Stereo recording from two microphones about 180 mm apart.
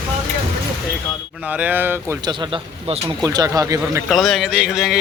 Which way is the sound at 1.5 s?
10° right (ahead or behind).